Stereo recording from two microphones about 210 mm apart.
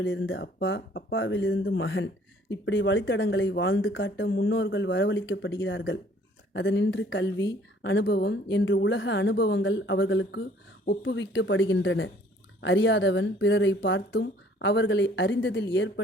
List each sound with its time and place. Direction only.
0.0 s speech: 65° left (ahead or behind)